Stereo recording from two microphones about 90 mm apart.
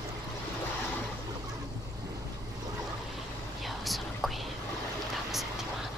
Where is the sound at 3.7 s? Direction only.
Centre (ahead or behind).